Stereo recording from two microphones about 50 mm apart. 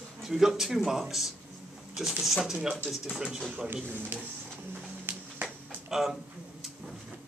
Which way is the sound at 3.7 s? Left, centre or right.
Right.